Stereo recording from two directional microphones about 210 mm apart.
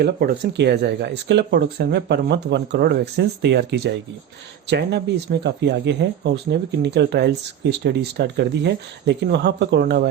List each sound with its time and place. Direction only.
0.0 s speech: 50° right (ahead or behind)